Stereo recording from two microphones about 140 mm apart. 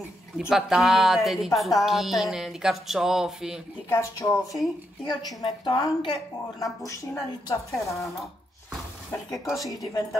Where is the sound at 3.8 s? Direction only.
20° left (ahead or behind).